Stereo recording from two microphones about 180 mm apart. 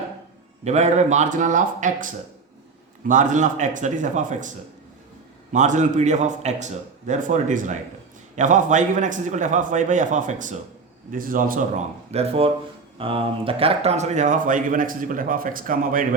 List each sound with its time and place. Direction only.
0.6 s a man's voice: 40° right (ahead or behind)
3.1 s a man's voice: 45° right (ahead or behind)
12.1 s a man's voice: 35° right (ahead or behind); by 16.0 s 50° right (ahead or behind)